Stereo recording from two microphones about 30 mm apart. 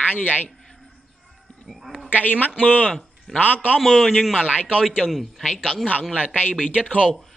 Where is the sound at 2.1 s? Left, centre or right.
Left.